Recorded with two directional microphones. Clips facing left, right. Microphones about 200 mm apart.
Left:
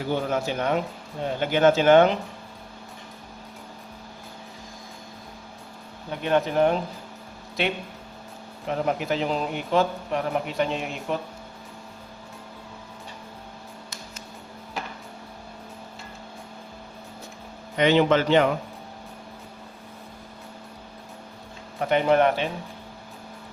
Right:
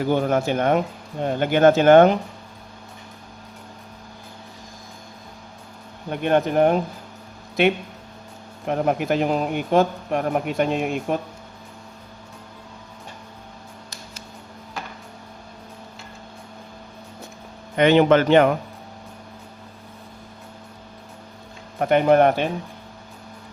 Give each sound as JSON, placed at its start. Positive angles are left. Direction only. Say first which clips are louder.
{"t": 0.0, "sound": "a man's voice", "louder": "right 5 dB", "side_deg": -50}
{"t": 6.1, "sound": "a man's voice", "louder": "right 4 dB", "side_deg": -50}
{"t": 8.6, "sound": "a man's voice", "louder": "right 4 dB", "side_deg": -50}
{"t": 17.7, "sound": "speech", "louder": "right 4 dB", "side_deg": -55}
{"t": 21.8, "sound": "a man's voice", "louder": "right 4 dB", "side_deg": -50}